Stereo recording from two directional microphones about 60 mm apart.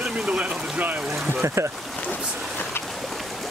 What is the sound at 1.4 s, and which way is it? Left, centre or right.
Speech, right.